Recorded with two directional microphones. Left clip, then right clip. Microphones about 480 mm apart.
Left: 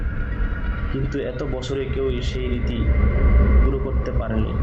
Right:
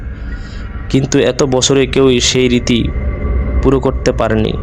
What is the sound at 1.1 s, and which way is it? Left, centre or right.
Speech, centre.